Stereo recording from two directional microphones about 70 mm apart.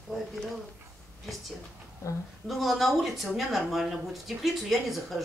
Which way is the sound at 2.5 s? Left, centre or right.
Centre.